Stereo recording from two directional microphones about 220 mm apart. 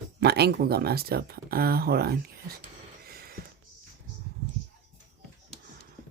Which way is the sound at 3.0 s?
45° right (ahead or behind).